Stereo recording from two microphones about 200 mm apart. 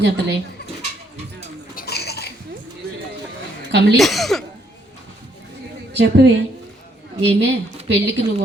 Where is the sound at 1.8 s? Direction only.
55° left (ahead or behind).